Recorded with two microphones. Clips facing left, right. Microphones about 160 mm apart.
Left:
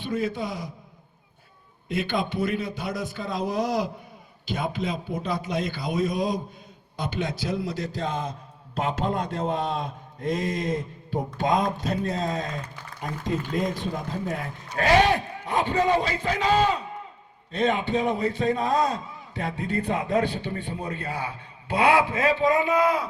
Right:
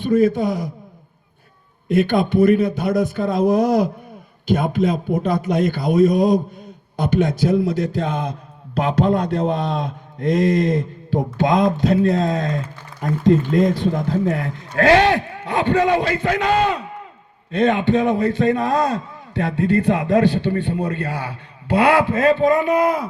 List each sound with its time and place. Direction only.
0.0 s speech: 50° right (ahead or behind)
1.9 s a man's voice: 50° right (ahead or behind)